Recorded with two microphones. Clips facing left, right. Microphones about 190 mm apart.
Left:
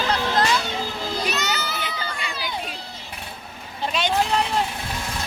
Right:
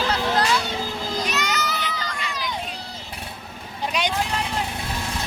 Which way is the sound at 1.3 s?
30° left (ahead or behind).